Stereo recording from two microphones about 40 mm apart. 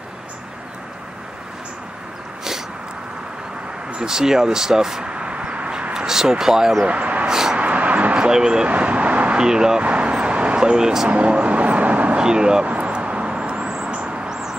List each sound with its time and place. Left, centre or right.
3.9 s speech: centre
5.0 s vehicle: right
5.9 s speech: centre
6.8 s speech: right
7.2 s a sound: centre
7.5 s vehicle: right
8.2 s speech: centre
8.6 s vehicle: right
9.4 s speech: centre
9.8 s vehicle: right; by 11.1 s centre
11.1 s vehicle: right
12.2 s speech: centre
12.6 s vehicle: right
13.8 s a sound: right